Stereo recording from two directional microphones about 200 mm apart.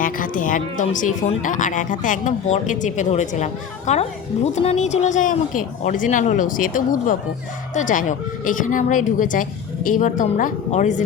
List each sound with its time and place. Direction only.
0.0 s speech: 45° left (ahead or behind)